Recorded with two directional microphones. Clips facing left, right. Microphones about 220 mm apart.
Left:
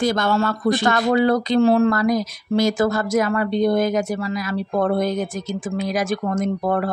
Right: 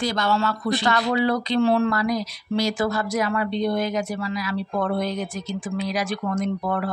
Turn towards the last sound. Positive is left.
turn(degrees=45)  # may be behind; listen again after turning